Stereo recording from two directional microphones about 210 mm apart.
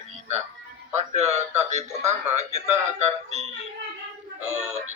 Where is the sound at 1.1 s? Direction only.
30° right (ahead or behind).